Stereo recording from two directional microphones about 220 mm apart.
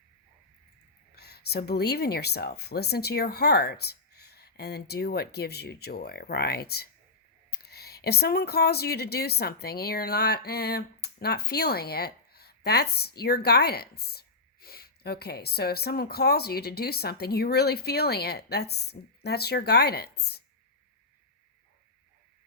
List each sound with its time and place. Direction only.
1.1 s a woman's voice: 45° left (ahead or behind)